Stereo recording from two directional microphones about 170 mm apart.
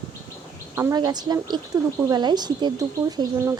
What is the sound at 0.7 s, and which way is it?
A woman's voice, 20° right (ahead or behind).